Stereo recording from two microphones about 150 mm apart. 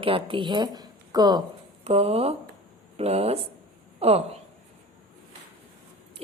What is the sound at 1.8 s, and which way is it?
A woman's voice, 40° right (ahead or behind).